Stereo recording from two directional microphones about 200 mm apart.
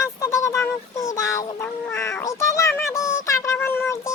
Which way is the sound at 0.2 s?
15° left (ahead or behind).